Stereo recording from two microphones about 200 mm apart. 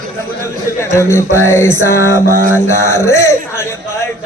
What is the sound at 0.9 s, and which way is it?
Speech, 15° left (ahead or behind).